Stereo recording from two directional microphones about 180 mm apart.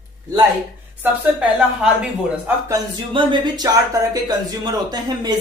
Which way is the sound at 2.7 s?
25° right (ahead or behind).